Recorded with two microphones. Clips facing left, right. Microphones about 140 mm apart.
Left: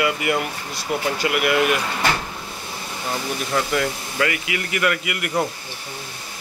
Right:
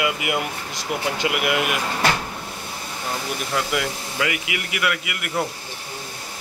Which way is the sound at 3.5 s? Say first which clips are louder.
Left 3 dB; 10° right (ahead or behind).